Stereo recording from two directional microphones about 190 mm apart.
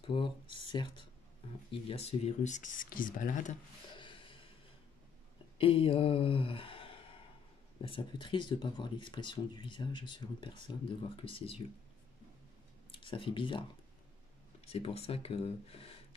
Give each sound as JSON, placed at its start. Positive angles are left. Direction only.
{"t": 0.0, "sound": "speech", "side_deg": 25}
{"t": 3.9, "sound": "a sound", "side_deg": 25}
{"t": 5.6, "sound": "speech", "side_deg": 30}
{"t": 12.9, "sound": "speech", "side_deg": 25}